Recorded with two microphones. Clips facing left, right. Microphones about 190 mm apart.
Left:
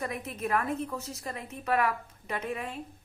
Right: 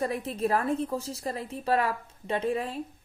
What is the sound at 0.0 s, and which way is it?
Speech, 30° right (ahead or behind).